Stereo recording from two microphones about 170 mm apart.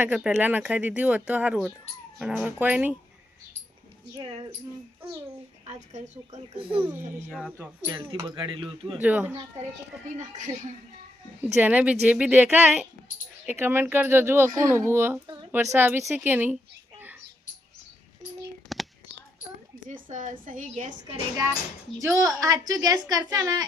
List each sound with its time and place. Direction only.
0.0 s speech: 5° right (ahead or behind)
5.6 s a woman's voice: 40° right (ahead or behind)
6.8 s speech: 10° right (ahead or behind)
7.3 s speech: 5° left (ahead or behind)
7.9 s a woman's voice: 25° right (ahead or behind)
9.0 s speech: 10° right (ahead or behind)
10.2 s a woman's voice: 45° right (ahead or behind)
11.4 s speech: 10° right (ahead or behind)
18.7 s a sound: centre (ahead or behind)
19.9 s a woman's voice: 50° right (ahead or behind)
22.0 s a woman's voice: 20° right (ahead or behind)